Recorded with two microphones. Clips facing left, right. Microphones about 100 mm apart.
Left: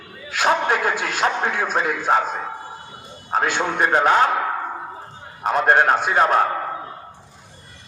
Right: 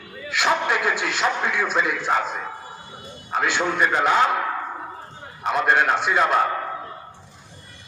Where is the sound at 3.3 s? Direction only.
45° left (ahead or behind).